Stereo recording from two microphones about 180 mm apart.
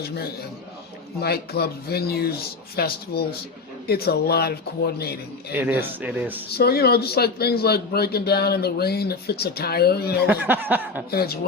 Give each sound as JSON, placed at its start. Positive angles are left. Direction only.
{"t": 1.2, "sound": "a man's voice", "side_deg": 60}
{"t": 5.5, "sound": "speech", "side_deg": -10}
{"t": 6.5, "sound": "a man's voice", "side_deg": 60}
{"t": 10.2, "sound": "speech", "side_deg": -10}
{"t": 11.1, "sound": "a man's voice", "side_deg": 60}